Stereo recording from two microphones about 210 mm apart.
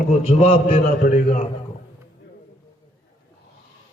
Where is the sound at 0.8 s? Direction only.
40° left (ahead or behind).